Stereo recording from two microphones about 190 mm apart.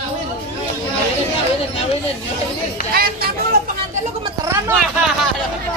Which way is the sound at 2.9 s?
50° right (ahead or behind).